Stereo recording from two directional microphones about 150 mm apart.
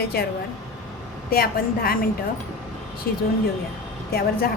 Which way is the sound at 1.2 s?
80° left.